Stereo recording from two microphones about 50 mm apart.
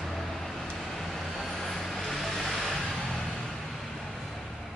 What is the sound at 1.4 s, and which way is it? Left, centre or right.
Vehicle, centre.